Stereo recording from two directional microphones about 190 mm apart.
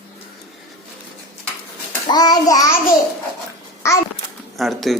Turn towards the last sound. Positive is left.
turn(degrees=0)  # may be behind; listen again after turning